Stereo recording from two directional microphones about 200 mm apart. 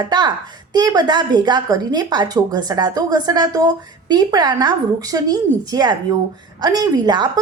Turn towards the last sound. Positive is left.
turn(degrees=-20)  # may be behind; listen again after turning